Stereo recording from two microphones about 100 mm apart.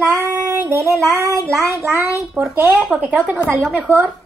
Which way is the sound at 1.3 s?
30° right (ahead or behind).